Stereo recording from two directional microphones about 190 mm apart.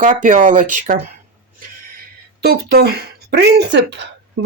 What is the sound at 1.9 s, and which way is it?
Speech, 55° right (ahead or behind).